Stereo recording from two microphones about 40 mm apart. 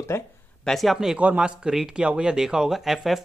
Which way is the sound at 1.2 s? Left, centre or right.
Right.